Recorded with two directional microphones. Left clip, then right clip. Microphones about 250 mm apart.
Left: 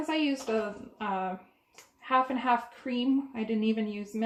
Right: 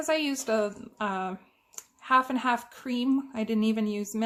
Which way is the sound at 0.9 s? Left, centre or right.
Right.